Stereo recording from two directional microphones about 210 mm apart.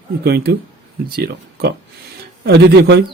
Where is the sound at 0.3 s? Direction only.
50° right (ahead or behind).